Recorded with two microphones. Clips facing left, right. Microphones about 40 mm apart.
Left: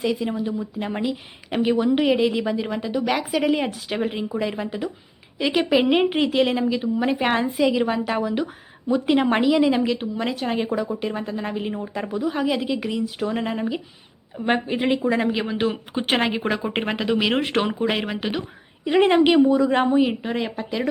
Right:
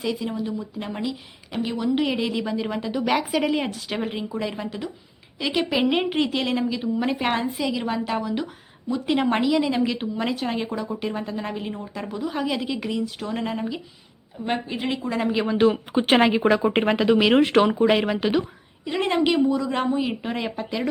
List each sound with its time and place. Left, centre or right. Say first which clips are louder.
0.0 s speech: left 3 dB; centre
9.9 s speech: left 1 dB; centre
14.3 s a woman's voice: left 5 dB; left
15.2 s speech: right 3 dB; centre
18.9 s a woman's voice: left 5 dB; left
20.2 s speech: left 2 dB; centre